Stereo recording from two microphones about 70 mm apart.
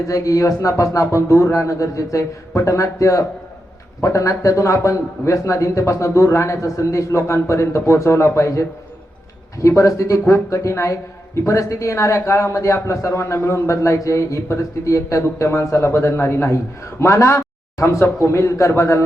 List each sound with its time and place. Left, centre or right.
0.1 s speech: left
9.6 s speech: left